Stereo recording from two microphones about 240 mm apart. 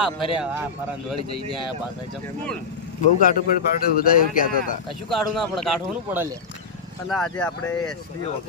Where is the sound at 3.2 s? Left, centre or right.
Left.